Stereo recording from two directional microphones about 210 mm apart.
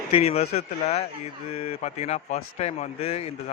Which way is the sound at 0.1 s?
30° left (ahead or behind).